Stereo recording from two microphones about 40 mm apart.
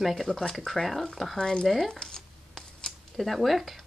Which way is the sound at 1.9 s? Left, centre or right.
Centre.